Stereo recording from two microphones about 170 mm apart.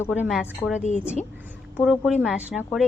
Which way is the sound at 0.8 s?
45° left (ahead or behind).